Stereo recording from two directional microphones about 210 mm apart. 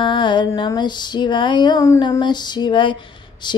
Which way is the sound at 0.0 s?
20° left (ahead or behind).